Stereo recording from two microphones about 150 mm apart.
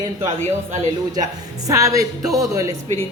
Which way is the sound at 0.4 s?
50° right (ahead or behind).